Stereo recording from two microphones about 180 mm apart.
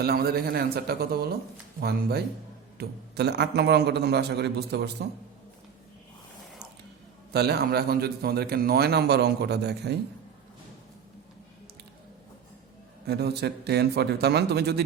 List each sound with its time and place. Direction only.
0.0 s a man's voice: 60° right (ahead or behind)
7.3 s a man's voice: 60° right (ahead or behind)
13.1 s a man's voice: 60° right (ahead or behind)